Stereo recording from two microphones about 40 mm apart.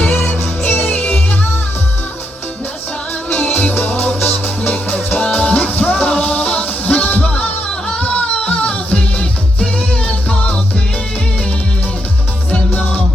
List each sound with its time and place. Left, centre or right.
0.3 s music: left
3.3 s music: left
12.5 s music: left